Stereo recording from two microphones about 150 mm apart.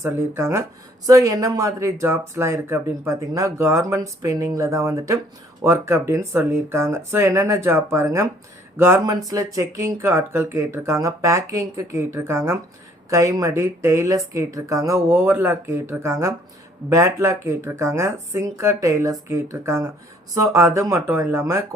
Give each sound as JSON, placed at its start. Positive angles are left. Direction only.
{"t": 0.0, "sound": "speech", "side_deg": -15}